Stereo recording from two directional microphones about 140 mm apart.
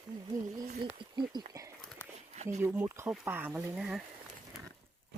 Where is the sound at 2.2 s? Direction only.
55° right (ahead or behind).